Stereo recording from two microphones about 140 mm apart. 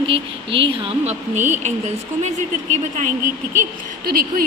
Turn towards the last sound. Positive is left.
turn(degrees=-90)